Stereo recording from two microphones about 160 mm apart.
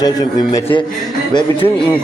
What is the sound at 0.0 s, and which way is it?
Speech, 25° left (ahead or behind).